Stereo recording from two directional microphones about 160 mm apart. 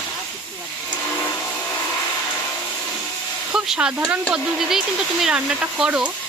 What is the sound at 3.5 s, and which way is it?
Speech, 5° right (ahead or behind).